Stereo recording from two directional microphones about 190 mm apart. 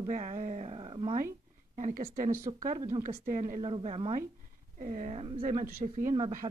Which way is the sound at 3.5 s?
30° right (ahead or behind).